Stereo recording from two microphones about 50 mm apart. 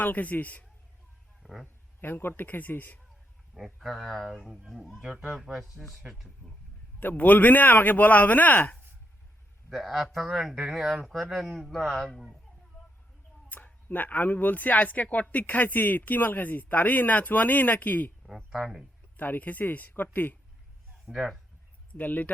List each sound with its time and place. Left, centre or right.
0.0 s speech: left
1.4 s a sound: centre
2.0 s speech: left
3.5 s speech: centre
4.9 s speech: right
5.8 s speech: centre
7.0 s speech: left
9.6 s speech: centre
11.7 s speech: centre
13.7 s speech: left
18.3 s speech: centre
19.1 s speech: left
21.1 s speech: centre
21.9 s speech: left